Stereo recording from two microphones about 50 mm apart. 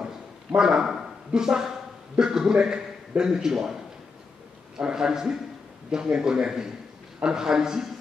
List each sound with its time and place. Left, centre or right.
0.6 s a man's voice: centre